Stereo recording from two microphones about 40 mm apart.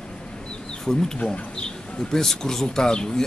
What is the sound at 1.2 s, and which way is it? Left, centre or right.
Speech, left.